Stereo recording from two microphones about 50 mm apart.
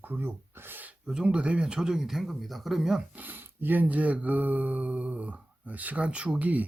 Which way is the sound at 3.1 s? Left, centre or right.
Right.